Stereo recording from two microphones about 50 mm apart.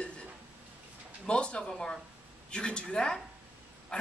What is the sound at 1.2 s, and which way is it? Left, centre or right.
A woman's voice, left.